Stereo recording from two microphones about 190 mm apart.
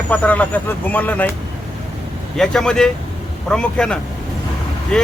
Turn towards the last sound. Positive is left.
turn(degrees=5)  # may be behind; listen again after turning